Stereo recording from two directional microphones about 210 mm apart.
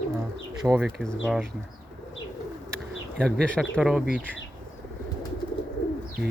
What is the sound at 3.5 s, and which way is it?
Speech, centre (ahead or behind).